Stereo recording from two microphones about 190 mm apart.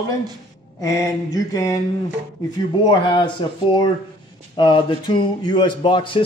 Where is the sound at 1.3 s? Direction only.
15° left (ahead or behind).